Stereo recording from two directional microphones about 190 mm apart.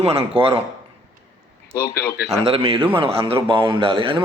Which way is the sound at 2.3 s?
30° right (ahead or behind).